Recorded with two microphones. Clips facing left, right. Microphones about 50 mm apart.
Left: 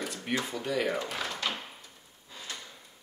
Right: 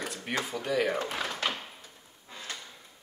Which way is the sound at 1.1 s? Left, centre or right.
Centre.